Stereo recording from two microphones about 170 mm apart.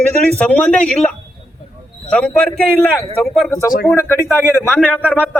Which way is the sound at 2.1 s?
5° left (ahead or behind).